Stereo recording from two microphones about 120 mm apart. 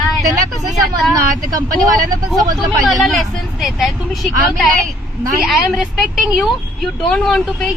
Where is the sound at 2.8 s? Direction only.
Centre (ahead or behind).